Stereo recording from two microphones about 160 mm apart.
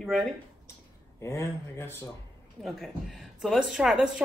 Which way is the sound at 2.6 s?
Centre (ahead or behind).